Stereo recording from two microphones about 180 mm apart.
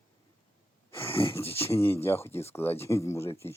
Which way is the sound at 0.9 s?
15° left (ahead or behind).